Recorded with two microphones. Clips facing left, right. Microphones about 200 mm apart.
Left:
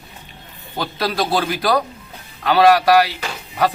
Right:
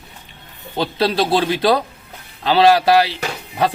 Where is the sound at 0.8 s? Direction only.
25° right (ahead or behind).